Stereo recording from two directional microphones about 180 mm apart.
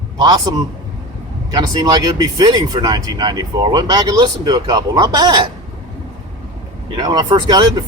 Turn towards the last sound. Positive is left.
turn(degrees=-25)  # may be behind; listen again after turning